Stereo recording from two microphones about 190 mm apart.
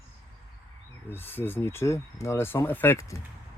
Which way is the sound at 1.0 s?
10° left (ahead or behind).